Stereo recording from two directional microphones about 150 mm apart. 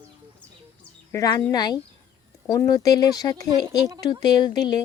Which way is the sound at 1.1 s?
20° left (ahead or behind).